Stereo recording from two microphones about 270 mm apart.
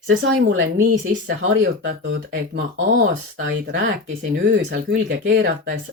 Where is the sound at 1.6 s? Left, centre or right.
Right.